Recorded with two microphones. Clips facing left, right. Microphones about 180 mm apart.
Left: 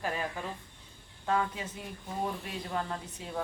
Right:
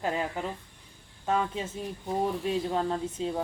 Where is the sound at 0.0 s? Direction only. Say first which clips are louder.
Right 4 dB; 20° right (ahead or behind).